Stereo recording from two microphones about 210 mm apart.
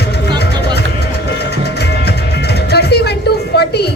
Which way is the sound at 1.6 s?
50° left (ahead or behind).